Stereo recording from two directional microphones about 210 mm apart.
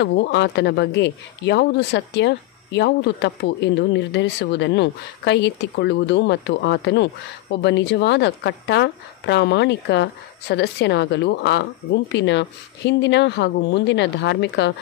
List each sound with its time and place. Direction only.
0.0 s speech: 55° left (ahead or behind)